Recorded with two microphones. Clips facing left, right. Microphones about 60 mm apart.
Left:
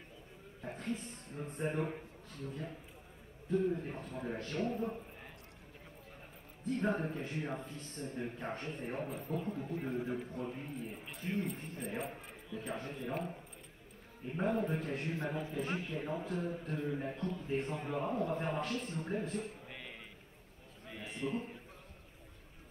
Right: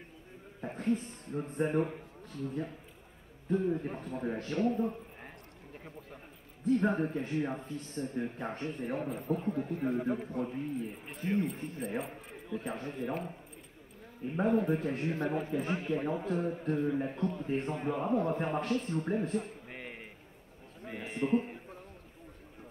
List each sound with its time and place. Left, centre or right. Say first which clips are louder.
0.6 s a man's voice: right 8 dB; right
6.6 s a man's voice: right 6 dB; right
11.8 s speech: right 3 dB; centre
12.4 s speech: right 4 dB; right
14.4 s a man's voice: right 6 dB; right